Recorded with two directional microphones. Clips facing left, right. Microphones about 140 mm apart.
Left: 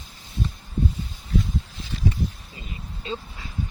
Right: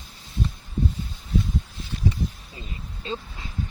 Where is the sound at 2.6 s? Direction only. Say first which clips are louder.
Even; 30° right (ahead or behind).